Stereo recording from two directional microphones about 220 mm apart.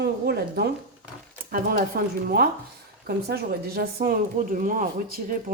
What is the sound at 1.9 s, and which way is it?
A woman's voice, 45° right (ahead or behind).